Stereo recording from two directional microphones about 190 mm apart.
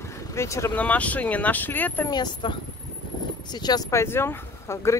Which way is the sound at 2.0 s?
25° left (ahead or behind).